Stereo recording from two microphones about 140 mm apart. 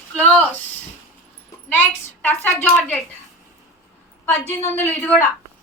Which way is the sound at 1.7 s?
15° left (ahead or behind).